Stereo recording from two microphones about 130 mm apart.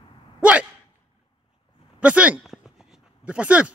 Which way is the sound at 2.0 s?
10° right (ahead or behind).